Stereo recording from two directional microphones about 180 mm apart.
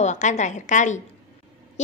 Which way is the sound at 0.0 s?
40° left (ahead or behind).